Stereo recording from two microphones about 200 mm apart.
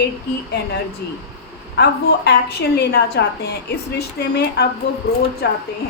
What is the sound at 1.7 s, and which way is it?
A woman's voice, 55° left (ahead or behind).